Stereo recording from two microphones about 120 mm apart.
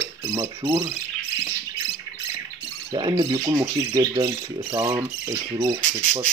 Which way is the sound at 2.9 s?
40° right (ahead or behind).